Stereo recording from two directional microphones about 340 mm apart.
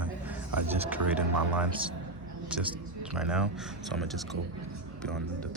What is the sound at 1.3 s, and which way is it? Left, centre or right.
Speech, right.